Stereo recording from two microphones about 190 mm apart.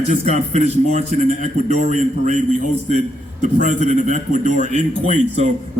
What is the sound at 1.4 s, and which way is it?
Speech, 40° left (ahead or behind).